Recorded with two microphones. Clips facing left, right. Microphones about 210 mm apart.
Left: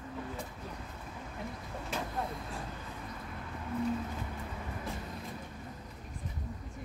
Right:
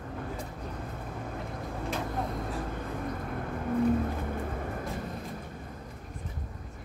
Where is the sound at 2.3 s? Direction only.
55° right (ahead or behind).